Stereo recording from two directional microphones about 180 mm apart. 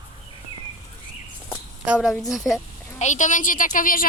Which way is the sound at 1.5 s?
5° right (ahead or behind).